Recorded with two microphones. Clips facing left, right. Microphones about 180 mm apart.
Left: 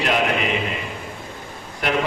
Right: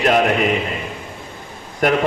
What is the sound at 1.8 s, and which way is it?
Speech, 45° right (ahead or behind).